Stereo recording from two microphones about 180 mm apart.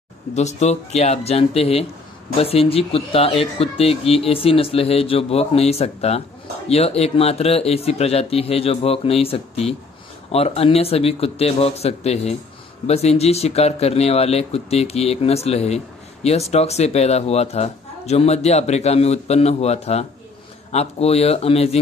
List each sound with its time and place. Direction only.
0.3 s a man's voice: 40° left (ahead or behind)